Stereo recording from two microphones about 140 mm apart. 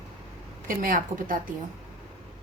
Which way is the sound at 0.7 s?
75° right (ahead or behind).